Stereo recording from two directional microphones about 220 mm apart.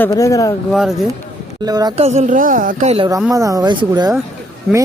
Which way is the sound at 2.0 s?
30° right (ahead or behind).